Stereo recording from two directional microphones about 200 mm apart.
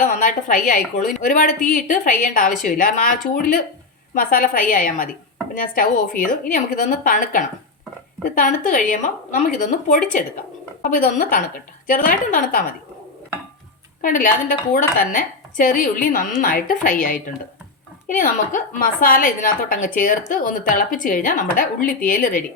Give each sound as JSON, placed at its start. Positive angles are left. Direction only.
{"t": 0.0, "sound": "a woman's voice", "side_deg": 40}
{"t": 14.0, "sound": "a woman's voice", "side_deg": 40}